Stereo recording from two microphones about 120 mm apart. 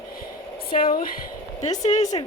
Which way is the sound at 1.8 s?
75° left (ahead or behind).